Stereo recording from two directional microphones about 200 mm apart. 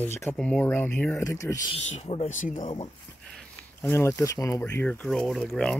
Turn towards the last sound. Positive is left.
turn(degrees=0)  # may be behind; listen again after turning